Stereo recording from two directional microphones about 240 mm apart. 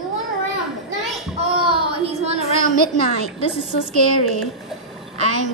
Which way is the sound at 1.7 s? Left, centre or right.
Right.